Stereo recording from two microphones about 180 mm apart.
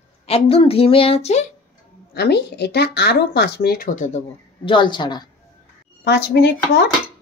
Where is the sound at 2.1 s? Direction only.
65° left (ahead or behind).